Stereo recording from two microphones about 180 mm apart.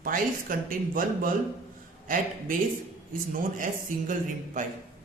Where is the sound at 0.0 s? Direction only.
50° right (ahead or behind).